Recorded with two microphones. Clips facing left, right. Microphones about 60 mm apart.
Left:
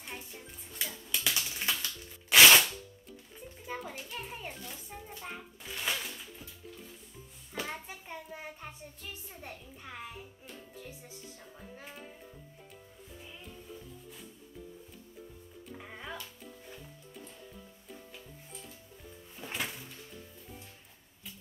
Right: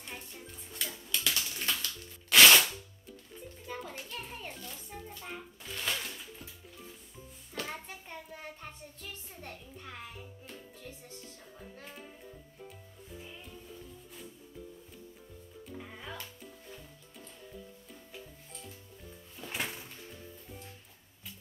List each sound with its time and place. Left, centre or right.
0.0 s music: centre
7.5 s child singing: centre
15.7 s music: centre
17.8 s music: centre
19.4 s music: left